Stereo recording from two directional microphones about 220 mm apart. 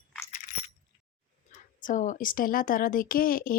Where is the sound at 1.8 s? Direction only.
35° left (ahead or behind).